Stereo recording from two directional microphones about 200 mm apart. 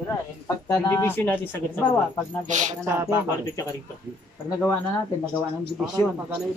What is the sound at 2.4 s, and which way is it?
Speech, 35° right (ahead or behind).